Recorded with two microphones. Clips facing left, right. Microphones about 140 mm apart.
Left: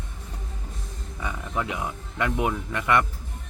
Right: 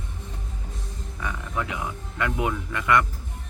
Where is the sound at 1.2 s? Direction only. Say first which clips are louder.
Left 1 dB; 25° left (ahead or behind).